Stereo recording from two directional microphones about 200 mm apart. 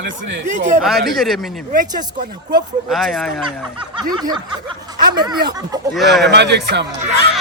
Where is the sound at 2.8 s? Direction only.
Centre (ahead or behind).